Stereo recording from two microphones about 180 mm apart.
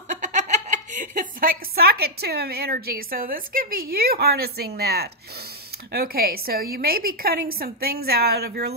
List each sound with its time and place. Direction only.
0.1 s a woman's voice: 45° right (ahead or behind); by 8.7 s 60° right (ahead or behind)